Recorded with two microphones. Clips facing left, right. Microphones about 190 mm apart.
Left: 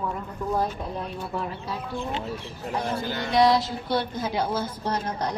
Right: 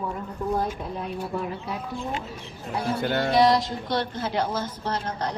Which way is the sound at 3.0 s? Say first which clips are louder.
Right 6 dB; 60° right (ahead or behind).